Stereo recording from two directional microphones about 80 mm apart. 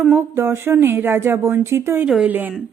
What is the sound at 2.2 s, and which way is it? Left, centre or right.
Speech, right.